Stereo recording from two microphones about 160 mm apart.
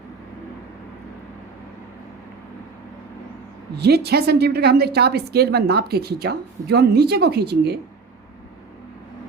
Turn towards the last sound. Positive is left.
turn(degrees=-85)